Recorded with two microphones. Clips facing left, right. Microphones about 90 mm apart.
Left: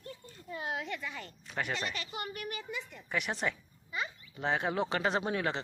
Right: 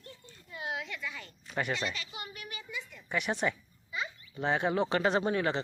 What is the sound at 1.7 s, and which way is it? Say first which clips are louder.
Speech: right 1 dB; 40° left (ahead or behind).